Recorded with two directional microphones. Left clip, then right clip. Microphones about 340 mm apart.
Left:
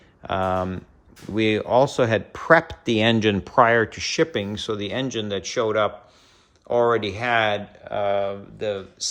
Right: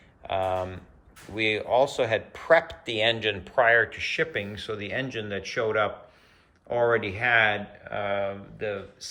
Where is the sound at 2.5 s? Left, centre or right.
Left.